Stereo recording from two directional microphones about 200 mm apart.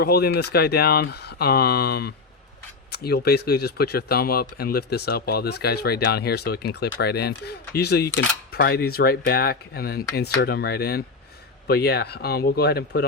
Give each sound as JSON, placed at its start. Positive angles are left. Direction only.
{"t": 0.0, "sound": "speech", "side_deg": 50}